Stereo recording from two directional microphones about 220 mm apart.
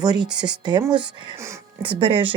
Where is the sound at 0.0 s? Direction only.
20° right (ahead or behind).